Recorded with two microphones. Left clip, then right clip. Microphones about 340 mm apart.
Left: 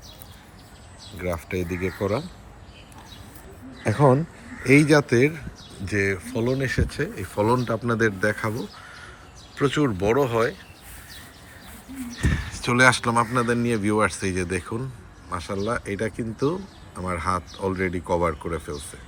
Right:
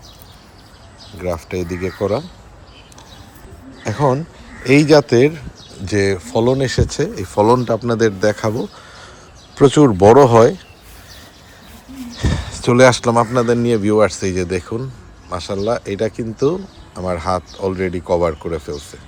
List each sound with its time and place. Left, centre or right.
1.2 s speech: centre
3.8 s speech: centre
9.6 s speech: centre
10.1 s speech: right
12.5 s speech: centre